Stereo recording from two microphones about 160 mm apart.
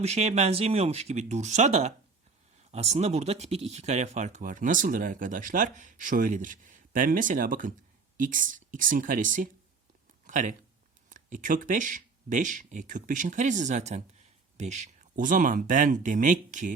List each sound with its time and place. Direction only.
0.0 s speech: 40° right (ahead or behind)